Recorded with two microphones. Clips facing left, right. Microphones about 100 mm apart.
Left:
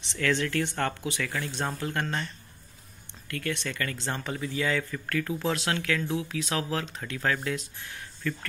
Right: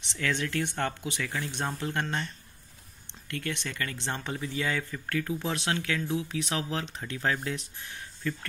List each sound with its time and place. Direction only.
0.0 s speech: 20° right (ahead or behind)